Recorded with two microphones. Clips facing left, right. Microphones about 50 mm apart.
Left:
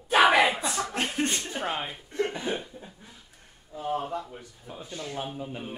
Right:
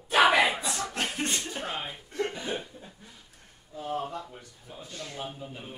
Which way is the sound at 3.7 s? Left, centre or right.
Centre.